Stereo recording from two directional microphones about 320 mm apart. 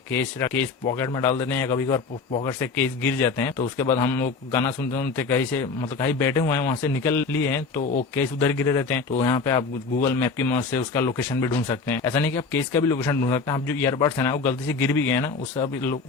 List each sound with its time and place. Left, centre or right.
0.1 s speech: centre